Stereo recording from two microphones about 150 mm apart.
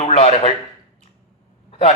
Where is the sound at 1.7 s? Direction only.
40° left (ahead or behind).